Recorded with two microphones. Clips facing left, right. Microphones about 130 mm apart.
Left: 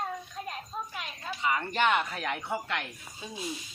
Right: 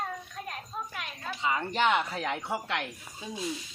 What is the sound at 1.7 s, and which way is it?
Speech, 15° right (ahead or behind).